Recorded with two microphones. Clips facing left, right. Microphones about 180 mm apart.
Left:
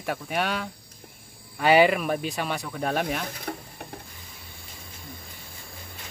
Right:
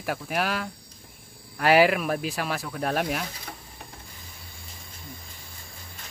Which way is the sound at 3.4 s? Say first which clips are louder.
Left 7 dB; 55° left (ahead or behind).